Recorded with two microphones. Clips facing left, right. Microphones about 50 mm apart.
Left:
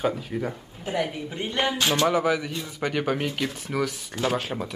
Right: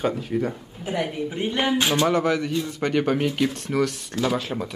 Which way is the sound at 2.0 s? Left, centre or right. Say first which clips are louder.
Right 1 dB; centre.